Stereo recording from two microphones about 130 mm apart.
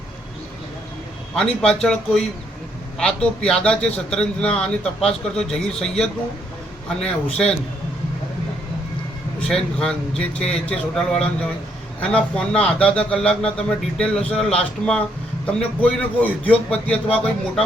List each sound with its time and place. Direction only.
1.4 s a man's voice: 5° left (ahead or behind)
9.5 s a man's voice: 5° left (ahead or behind)